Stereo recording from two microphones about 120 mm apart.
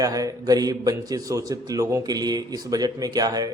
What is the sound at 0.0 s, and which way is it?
A man's voice, 30° right (ahead or behind).